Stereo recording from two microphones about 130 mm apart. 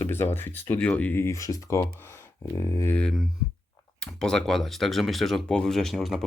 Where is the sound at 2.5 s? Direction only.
20° left (ahead or behind).